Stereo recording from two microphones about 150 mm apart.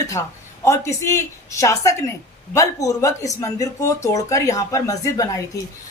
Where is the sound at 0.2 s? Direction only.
20° left (ahead or behind).